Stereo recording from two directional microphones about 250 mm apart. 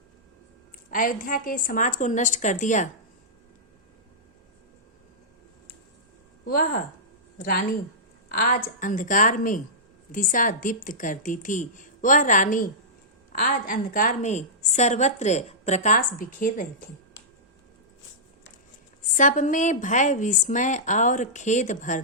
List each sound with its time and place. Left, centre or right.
0.9 s a woman's voice: left
6.4 s speech: left
8.3 s a woman's voice: left
19.1 s a woman's voice: left